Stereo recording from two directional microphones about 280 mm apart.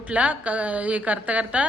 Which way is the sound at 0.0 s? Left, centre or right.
Centre.